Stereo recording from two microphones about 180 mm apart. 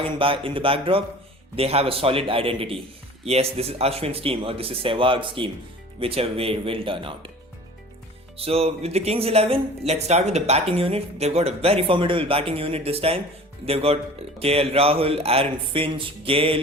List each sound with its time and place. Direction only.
0.2 s speech: 30° right (ahead or behind)
8.4 s speech: 30° right (ahead or behind)